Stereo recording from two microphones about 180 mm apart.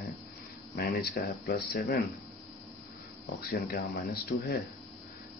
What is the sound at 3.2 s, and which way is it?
Speech, 55° left (ahead or behind).